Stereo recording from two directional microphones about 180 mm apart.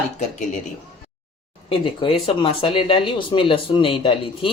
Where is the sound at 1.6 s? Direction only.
30° left (ahead or behind).